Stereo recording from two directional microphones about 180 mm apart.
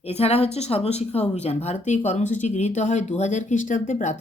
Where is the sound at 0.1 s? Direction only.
35° left (ahead or behind).